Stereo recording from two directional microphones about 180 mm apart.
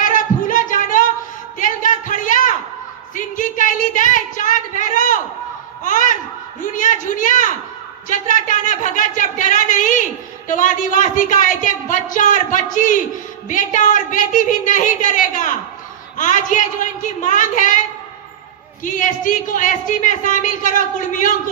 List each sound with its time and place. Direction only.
0.0 s a sound: 45° left (ahead or behind)
3.2 s a man's voice: 45° left (ahead or behind)
18.8 s a man's voice: 45° left (ahead or behind)